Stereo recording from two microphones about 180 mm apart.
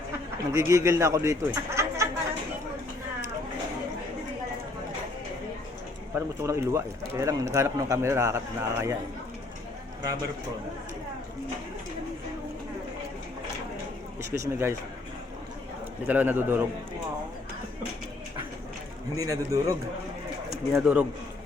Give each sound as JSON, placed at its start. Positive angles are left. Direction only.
{"t": 0.5, "sound": "speech", "side_deg": -15}
{"t": 1.5, "sound": "a sound", "side_deg": -15}
{"t": 6.1, "sound": "speech", "side_deg": -15}
{"t": 14.2, "sound": "speech", "side_deg": -15}
{"t": 16.0, "sound": "speech", "side_deg": -10}
{"t": 19.1, "sound": "speech", "side_deg": -20}
{"t": 20.7, "sound": "speech", "side_deg": -5}